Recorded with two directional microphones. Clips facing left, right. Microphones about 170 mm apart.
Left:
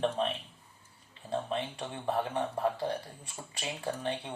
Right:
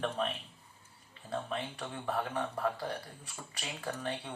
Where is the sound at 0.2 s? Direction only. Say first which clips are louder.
Left 3 dB; 30° left (ahead or behind).